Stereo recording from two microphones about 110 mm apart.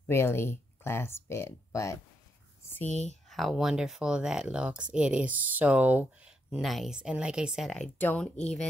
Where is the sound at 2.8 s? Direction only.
90° left.